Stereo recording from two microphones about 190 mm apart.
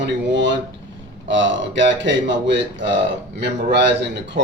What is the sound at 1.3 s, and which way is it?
A man's voice, 75° right (ahead or behind).